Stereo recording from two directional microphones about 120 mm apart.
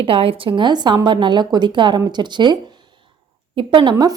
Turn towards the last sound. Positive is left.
turn(degrees=-35)  # may be behind; listen again after turning